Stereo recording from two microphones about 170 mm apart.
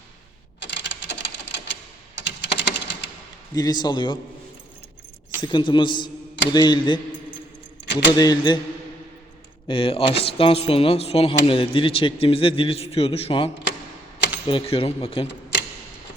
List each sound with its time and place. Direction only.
0.6 s typewriter: 90° left
2.1 s typing: 90° left
3.5 s a woman's voice: 25° left (ahead or behind)
5.4 s a woman's voice: 25° left (ahead or behind)
8.1 s a woman's voice: 20° left (ahead or behind)
9.6 s a man's voice: 30° left (ahead or behind)